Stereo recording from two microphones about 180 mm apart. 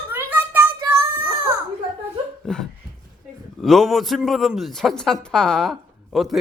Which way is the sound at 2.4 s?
5° left (ahead or behind).